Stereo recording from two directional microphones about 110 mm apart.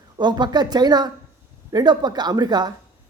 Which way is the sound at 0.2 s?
40° right (ahead or behind).